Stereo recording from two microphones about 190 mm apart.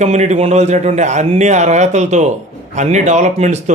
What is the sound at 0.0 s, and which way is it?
Speech, 35° right (ahead or behind).